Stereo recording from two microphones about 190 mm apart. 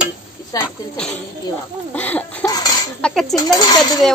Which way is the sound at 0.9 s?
5° left (ahead or behind).